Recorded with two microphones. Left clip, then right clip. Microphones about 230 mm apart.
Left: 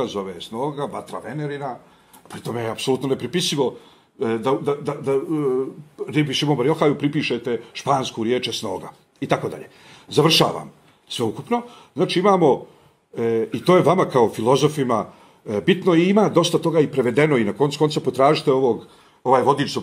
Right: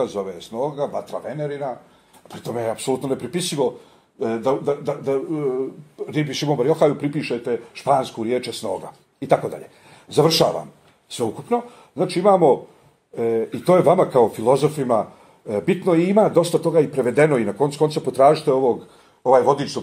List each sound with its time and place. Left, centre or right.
0.0 s speech: left